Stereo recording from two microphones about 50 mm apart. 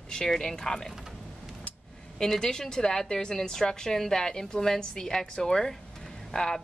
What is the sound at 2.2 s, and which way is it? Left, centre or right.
A woman's voice, centre.